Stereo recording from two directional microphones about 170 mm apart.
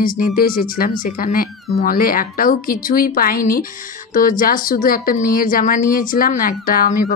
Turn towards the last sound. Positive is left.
turn(degrees=55)  # may be behind; listen again after turning